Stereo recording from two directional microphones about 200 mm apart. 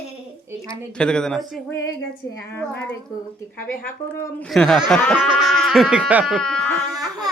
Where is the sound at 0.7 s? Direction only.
5° left (ahead or behind).